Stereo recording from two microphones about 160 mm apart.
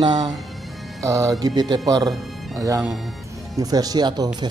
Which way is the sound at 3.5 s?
25° right (ahead or behind).